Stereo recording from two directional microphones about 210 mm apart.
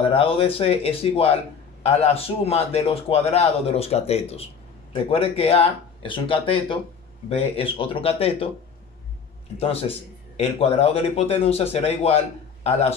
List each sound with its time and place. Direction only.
0.0 s a man's voice: 25° left (ahead or behind)
9.6 s a man's voice: 30° left (ahead or behind)